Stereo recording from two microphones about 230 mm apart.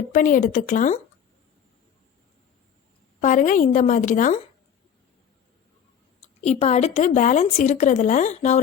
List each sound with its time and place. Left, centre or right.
0.1 s speech: left
3.2 s speech: left
6.4 s speech: left